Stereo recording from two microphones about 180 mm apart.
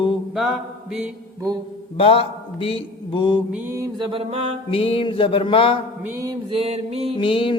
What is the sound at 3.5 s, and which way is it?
Mantra, 15° right (ahead or behind).